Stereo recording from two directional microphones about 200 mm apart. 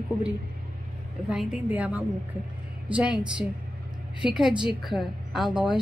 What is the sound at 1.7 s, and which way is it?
A woman's voice, 5° right (ahead or behind).